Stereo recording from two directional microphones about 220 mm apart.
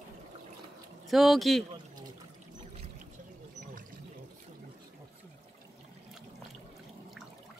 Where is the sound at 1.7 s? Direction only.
20° right (ahead or behind).